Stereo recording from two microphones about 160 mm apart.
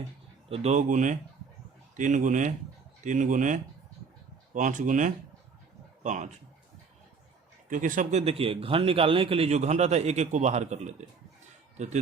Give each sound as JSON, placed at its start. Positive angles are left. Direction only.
{"t": 0.5, "sound": "a man's voice", "side_deg": -45}
{"t": 7.7, "sound": "a man's voice", "side_deg": -55}
{"t": 8.2, "sound": "a man's voice", "side_deg": -35}